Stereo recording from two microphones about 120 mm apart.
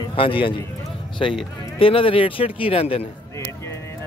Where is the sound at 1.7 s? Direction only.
50° left (ahead or behind).